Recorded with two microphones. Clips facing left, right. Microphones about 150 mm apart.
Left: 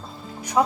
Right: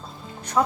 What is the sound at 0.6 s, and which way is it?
Speech, 10° left (ahead or behind).